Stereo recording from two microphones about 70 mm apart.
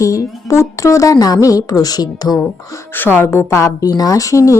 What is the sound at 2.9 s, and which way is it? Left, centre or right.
Speech, left.